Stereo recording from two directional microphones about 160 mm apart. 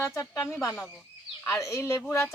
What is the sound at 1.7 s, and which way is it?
Speech, 15° left (ahead or behind).